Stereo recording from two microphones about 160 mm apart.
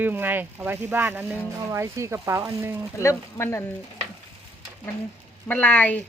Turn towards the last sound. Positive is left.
turn(degrees=10)  # may be behind; listen again after turning